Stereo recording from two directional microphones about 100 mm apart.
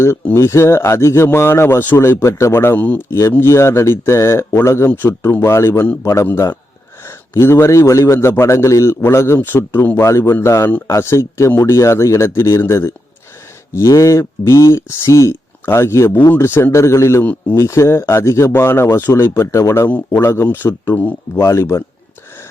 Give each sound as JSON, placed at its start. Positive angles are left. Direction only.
{"t": 0.3, "sound": "a man's voice", "side_deg": 25}
{"t": 3.1, "sound": "a man's voice", "side_deg": 25}